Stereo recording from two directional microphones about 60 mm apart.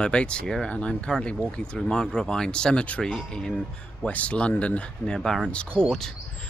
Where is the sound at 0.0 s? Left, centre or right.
Centre.